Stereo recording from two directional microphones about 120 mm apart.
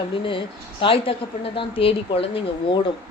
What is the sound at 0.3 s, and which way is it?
A woman's voice, 45° left (ahead or behind).